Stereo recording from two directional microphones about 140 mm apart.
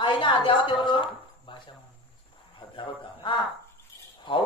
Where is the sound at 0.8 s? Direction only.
35° left (ahead or behind).